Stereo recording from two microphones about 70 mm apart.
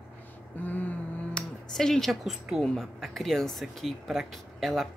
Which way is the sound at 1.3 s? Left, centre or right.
Centre.